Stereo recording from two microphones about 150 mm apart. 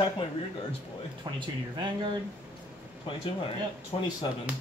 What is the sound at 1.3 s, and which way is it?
Speech, 30° right (ahead or behind).